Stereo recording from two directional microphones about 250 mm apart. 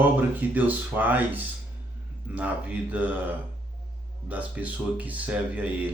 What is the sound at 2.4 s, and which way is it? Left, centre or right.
Speech, centre.